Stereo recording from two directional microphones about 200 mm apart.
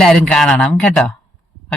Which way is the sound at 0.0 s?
Centre (ahead or behind).